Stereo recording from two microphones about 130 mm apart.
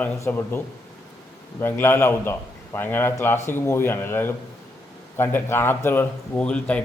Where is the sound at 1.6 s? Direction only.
20° left (ahead or behind).